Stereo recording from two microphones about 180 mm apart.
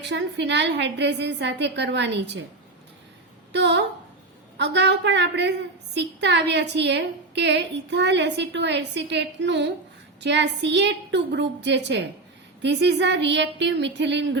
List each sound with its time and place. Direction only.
0.0 s a woman's voice: 75° right (ahead or behind)
3.5 s a woman's voice: 75° right (ahead or behind)